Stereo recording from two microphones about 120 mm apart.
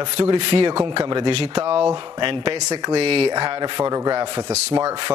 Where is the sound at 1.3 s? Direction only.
60° right (ahead or behind).